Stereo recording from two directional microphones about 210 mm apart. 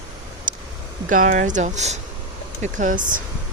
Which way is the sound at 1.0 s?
40° right (ahead or behind).